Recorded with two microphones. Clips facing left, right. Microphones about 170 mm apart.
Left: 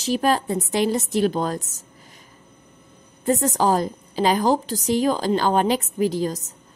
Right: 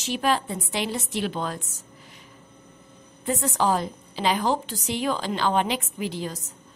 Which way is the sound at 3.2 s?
40° left (ahead or behind).